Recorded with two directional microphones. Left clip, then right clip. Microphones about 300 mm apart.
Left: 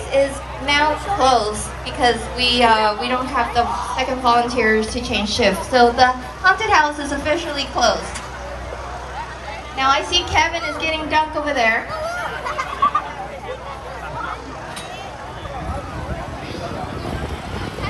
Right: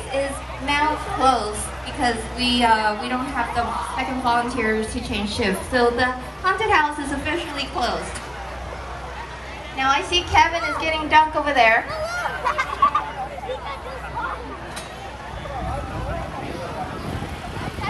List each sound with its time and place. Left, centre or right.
0.7 s a sound: left
2.0 s a woman's voice: left
9.8 s a woman's voice: centre